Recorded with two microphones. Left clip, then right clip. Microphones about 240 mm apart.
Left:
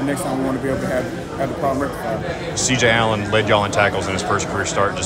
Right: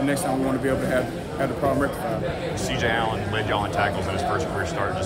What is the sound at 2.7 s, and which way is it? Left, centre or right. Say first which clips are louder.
A man's voice: left 8 dB; left.